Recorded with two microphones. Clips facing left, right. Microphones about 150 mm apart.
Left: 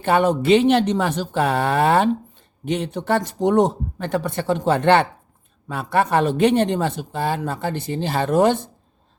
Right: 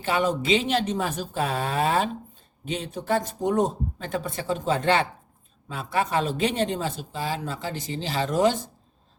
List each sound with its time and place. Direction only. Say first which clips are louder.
0.0 s speech: left 7 dB; 55° left (ahead or behind)